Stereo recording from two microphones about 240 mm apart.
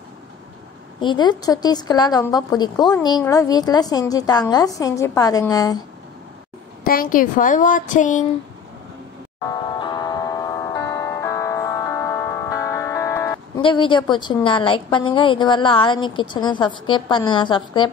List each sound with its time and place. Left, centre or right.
1.0 s a woman's voice: centre
6.8 s a woman's voice: left
9.5 s music: centre